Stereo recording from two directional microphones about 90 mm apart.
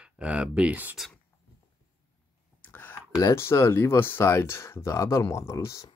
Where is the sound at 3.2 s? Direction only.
35° left (ahead or behind).